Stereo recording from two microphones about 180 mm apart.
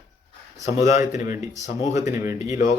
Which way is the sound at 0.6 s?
40° left (ahead or behind).